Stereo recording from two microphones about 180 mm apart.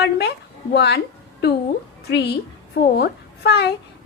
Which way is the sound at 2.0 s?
65° left (ahead or behind).